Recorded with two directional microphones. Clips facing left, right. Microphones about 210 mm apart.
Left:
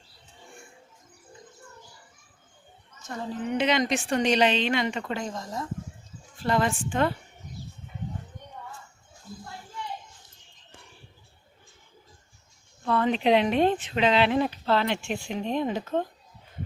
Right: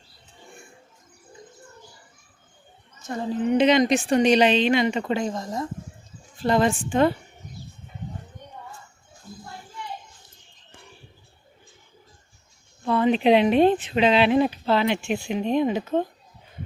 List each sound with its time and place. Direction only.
3.1 s a woman's voice: 20° right (ahead or behind)
12.8 s a sound: 5° right (ahead or behind)
13.1 s speech: 15° right (ahead or behind)